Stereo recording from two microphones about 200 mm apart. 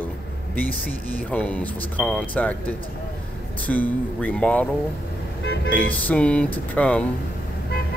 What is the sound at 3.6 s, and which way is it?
Speech, 5° left (ahead or behind).